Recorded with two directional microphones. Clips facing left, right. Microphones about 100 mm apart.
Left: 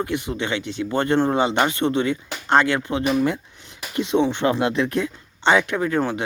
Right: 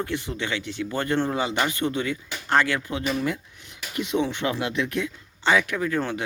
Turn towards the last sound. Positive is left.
turn(degrees=15)  # may be behind; listen again after turning